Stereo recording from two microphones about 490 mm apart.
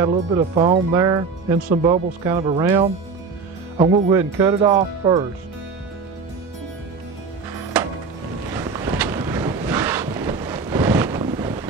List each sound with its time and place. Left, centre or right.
0.0 s speech: centre
7.7 s music: centre
8.5 s wind noise: centre